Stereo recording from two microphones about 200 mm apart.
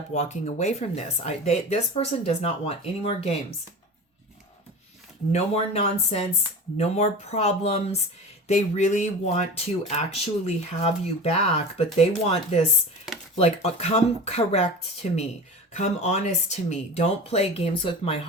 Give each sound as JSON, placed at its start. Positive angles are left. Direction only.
{"t": 0.1, "sound": "speech", "side_deg": 35}
{"t": 5.3, "sound": "speech", "side_deg": 30}